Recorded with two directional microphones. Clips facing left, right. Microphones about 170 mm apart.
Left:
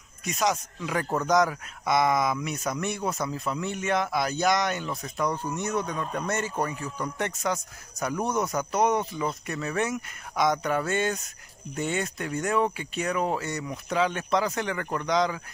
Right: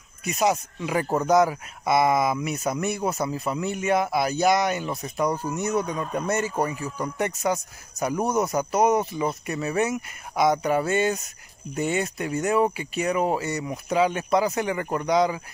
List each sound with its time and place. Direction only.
0.2 s speech: 10° right (ahead or behind)